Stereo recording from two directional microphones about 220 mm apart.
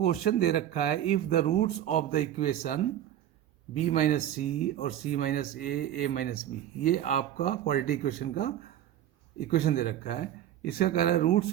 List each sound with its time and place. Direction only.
0.1 s speech: 45° left (ahead or behind)